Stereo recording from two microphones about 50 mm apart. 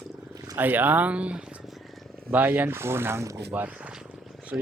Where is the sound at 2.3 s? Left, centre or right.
Right.